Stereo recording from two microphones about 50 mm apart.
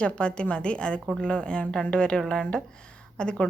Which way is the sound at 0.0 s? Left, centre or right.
Left.